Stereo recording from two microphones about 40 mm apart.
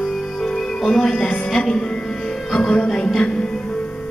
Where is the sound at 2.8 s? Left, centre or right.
Left.